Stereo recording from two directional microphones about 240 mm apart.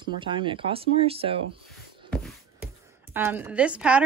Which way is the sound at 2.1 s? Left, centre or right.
Centre.